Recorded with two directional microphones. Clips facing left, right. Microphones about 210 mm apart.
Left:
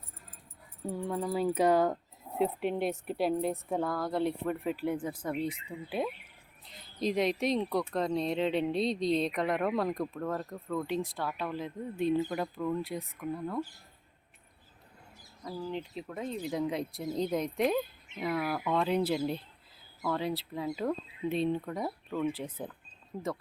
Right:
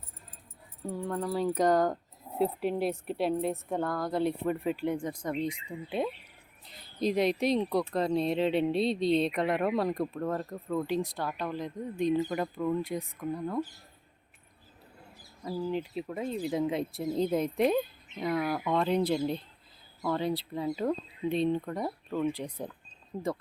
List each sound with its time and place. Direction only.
0.9 s speech: 5° left (ahead or behind)
6.7 s speech: centre (ahead or behind)
13.1 s speech: 20° right (ahead or behind)
15.4 s speech: 5° right (ahead or behind)
21.8 s speech: 10° right (ahead or behind)
22.3 s speech: 5° left (ahead or behind)